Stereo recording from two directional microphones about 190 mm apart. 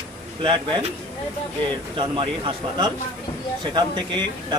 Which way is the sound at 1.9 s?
25° right (ahead or behind).